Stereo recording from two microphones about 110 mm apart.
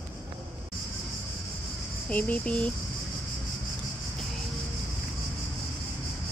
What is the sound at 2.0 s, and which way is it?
Speech, 15° left (ahead or behind).